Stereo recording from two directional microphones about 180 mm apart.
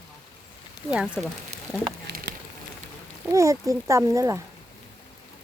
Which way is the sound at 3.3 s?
15° right (ahead or behind).